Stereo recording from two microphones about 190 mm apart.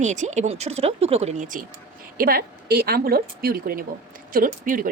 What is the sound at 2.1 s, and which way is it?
Speech, 50° right (ahead or behind).